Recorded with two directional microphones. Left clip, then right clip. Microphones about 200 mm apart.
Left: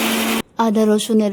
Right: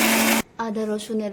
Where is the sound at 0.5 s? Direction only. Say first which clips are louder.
Left 10 dB; 35° left (ahead or behind).